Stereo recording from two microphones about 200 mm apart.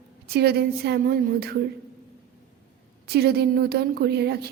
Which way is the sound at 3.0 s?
55° right (ahead or behind).